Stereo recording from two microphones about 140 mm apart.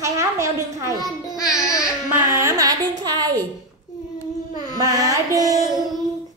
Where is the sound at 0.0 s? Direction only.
25° right (ahead or behind).